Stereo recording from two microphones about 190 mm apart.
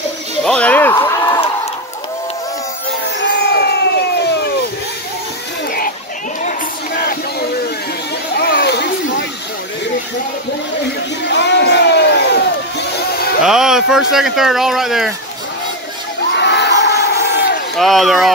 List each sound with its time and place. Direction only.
0.4 s music: 5° left (ahead or behind)
0.9 s a sound: 20° left (ahead or behind)
3.2 s crowd: 60° left (ahead or behind)
7.0 s music: 55° left (ahead or behind)
8.4 s a sound: 60° left (ahead or behind)
11.2 s crowd: 65° left (ahead or behind)
13.4 s speech: 5° right (ahead or behind)
16.3 s crowd: 65° left (ahead or behind)
17.7 s speech: centre (ahead or behind)